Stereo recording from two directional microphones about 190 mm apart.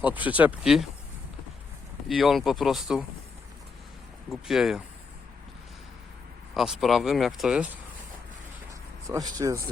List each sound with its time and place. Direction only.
0.0 s speech: 10° right (ahead or behind)
2.0 s speech: centre (ahead or behind)
4.3 s speech: centre (ahead or behind)
6.5 s speech: centre (ahead or behind)
9.0 s speech: 20° right (ahead or behind)